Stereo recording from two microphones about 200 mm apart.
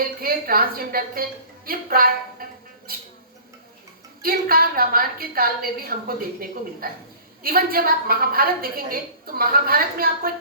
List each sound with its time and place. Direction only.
0.2 s a woman's voice: 50° right (ahead or behind)
4.2 s a woman's voice: 45° right (ahead or behind)